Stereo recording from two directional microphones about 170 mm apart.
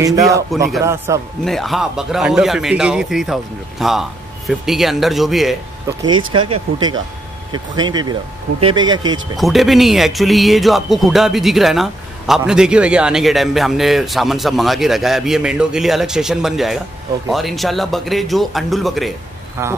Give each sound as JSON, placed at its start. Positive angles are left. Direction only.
{"t": 0.0, "sound": "a man's voice", "side_deg": -20}
{"t": 1.4, "sound": "speech", "side_deg": 0}
{"t": 6.0, "sound": "speech", "side_deg": -30}
{"t": 9.4, "sound": "speech", "side_deg": 0}
{"t": 19.6, "sound": "a man's voice", "side_deg": -15}